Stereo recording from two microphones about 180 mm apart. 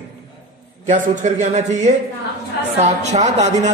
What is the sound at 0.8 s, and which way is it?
Speech, 40° right (ahead or behind).